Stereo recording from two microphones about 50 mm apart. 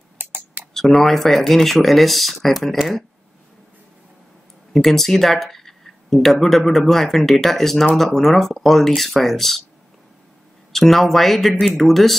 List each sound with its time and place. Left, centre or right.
0.2 s typing: right
0.7 s speech: centre
4.7 s speech: centre
10.7 s speech: centre